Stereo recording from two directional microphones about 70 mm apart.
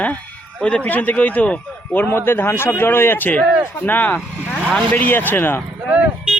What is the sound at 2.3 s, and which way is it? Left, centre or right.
Speech, left.